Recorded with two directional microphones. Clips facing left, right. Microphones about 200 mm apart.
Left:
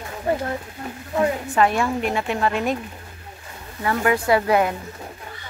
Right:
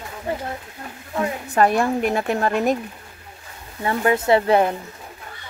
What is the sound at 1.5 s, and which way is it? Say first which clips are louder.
A woman's voice: right 3 dB; 40° right (ahead or behind).